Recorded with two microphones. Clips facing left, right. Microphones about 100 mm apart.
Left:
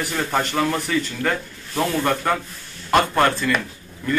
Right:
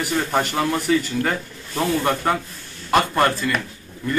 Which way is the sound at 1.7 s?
10° right (ahead or behind).